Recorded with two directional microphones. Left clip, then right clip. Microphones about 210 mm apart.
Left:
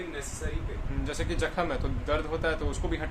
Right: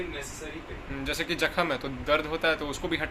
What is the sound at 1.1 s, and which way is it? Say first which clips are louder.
Speech: right 4 dB; 5° right (ahead or behind).